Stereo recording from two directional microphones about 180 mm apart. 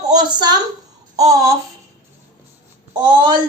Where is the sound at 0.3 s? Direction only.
25° right (ahead or behind).